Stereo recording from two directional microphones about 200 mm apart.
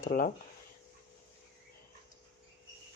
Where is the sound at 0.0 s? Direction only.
40° left (ahead or behind).